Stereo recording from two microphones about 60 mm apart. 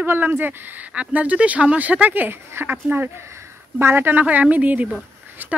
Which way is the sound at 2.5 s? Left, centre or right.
Right.